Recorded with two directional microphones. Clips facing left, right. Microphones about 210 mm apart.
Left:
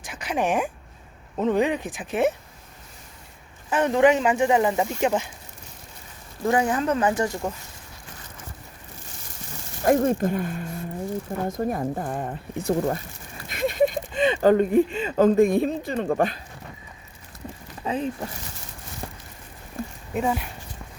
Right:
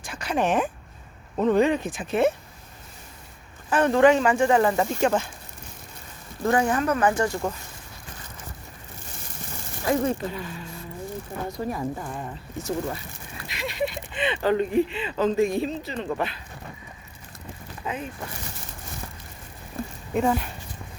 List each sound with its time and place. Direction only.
0.0 s a sound: 15° left (ahead or behind)
1.4 s speech: 15° left (ahead or behind)
3.7 s speech: 20° left (ahead or behind)
6.4 s speech: 20° left (ahead or behind)
9.8 s speech: 50° left (ahead or behind)
17.8 s speech: 30° left (ahead or behind)
20.1 s speech: 5° left (ahead or behind)